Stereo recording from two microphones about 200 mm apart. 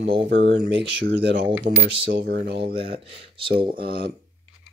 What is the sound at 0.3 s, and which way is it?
Speech, 65° right (ahead or behind).